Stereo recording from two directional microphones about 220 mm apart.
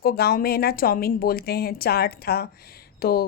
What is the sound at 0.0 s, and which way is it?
A woman's voice, 45° left (ahead or behind).